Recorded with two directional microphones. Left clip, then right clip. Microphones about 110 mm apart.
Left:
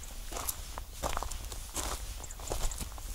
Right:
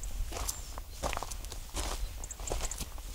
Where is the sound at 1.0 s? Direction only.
30° left (ahead or behind).